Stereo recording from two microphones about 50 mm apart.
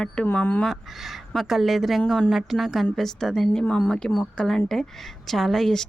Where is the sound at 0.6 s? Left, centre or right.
Centre.